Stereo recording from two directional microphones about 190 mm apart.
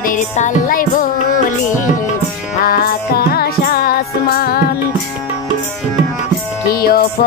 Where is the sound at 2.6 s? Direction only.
55° left (ahead or behind).